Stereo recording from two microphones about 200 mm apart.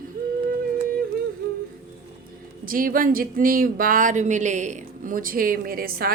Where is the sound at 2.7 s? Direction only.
45° right (ahead or behind).